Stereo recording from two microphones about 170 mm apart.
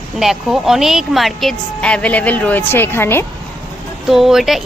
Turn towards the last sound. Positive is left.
turn(degrees=0)  # may be behind; listen again after turning